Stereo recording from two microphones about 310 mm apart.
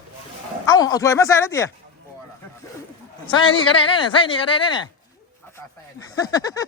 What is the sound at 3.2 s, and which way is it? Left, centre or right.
Speech, centre.